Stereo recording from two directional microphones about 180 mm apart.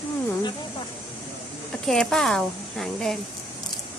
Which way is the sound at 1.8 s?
Centre (ahead or behind).